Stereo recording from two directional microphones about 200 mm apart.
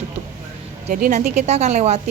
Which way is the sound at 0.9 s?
40° right (ahead or behind).